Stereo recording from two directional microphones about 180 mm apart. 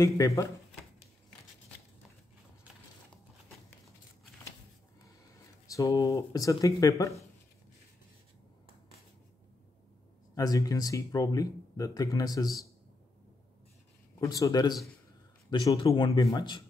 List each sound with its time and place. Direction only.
0.0 s speech: 20° left (ahead or behind)
5.7 s speech: 20° left (ahead or behind)
10.3 s speech: 20° left (ahead or behind)
14.2 s speech: 20° left (ahead or behind)